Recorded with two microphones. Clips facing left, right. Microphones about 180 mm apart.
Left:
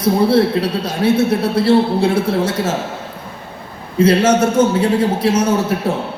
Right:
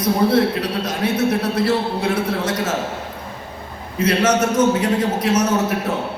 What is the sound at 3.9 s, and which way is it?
A man's voice, 30° left (ahead or behind).